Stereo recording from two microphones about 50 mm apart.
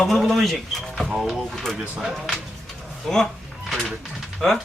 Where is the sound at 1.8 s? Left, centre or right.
Centre.